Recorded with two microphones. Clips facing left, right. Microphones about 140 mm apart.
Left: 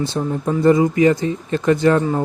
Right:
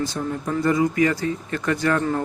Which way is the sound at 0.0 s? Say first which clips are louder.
Left 5 dB; 25° left (ahead or behind).